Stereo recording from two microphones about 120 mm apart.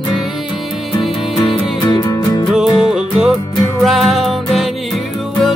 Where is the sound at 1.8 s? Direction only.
35° left (ahead or behind).